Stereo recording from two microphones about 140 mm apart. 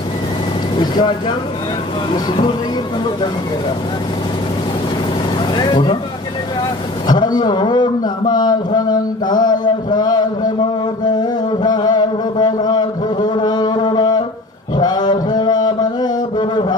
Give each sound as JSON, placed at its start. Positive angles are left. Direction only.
{"t": 0.7, "sound": "speech", "side_deg": 30}
{"t": 5.5, "sound": "speech", "side_deg": 35}
{"t": 7.1, "sound": "speech", "side_deg": 30}
{"t": 11.1, "sound": "a sound", "side_deg": 30}
{"t": 14.8, "sound": "mantra", "side_deg": 30}